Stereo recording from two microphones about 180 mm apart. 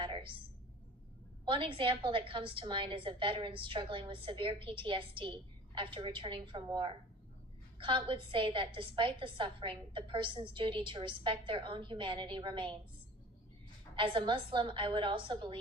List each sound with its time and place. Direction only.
0.0 s a sound: 30° right (ahead or behind)
1.5 s a woman's voice: 30° right (ahead or behind)
13.9 s a woman's voice: 30° right (ahead or behind)